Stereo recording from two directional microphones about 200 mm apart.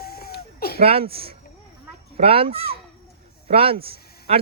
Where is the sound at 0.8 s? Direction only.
30° right (ahead or behind).